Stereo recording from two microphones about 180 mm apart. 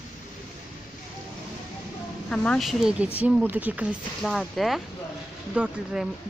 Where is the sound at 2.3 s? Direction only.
5° left (ahead or behind).